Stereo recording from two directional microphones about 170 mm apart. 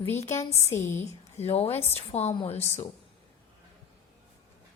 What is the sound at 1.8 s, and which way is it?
Speech, 15° left (ahead or behind).